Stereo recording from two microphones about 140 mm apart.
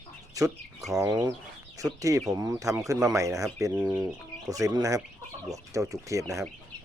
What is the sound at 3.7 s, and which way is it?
Speech, 10° right (ahead or behind).